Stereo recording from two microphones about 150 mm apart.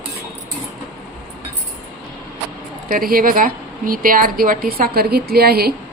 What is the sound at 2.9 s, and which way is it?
A woman's voice, 75° right (ahead or behind).